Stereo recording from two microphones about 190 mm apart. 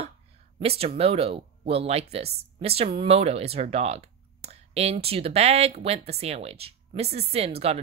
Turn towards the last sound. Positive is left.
turn(degrees=-30)  # may be behind; listen again after turning